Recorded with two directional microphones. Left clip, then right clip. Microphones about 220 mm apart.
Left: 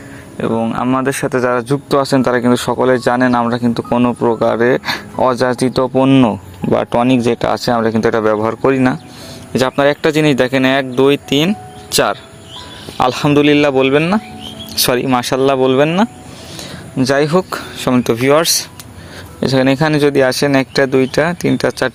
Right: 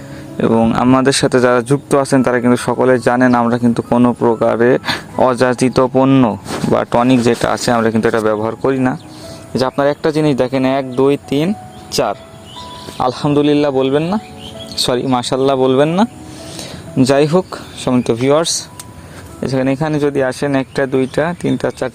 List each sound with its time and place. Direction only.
0.3 s speech: 30° right (ahead or behind)
2.0 s speech: 5° right (ahead or behind)
6.0 s speech: centre (ahead or behind)
16.6 s a sound: 20° right (ahead or behind)
17.3 s speech: centre (ahead or behind)